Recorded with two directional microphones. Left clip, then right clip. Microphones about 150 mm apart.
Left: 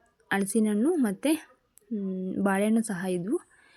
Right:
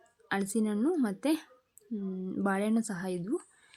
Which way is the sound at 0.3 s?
15° left (ahead or behind).